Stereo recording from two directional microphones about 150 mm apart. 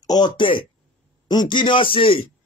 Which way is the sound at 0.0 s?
25° left (ahead or behind).